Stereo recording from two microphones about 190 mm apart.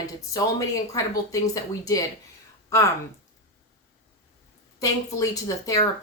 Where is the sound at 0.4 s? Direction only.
20° left (ahead or behind).